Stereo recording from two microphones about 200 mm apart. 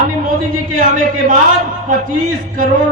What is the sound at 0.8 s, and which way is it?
Speech, 40° right (ahead or behind).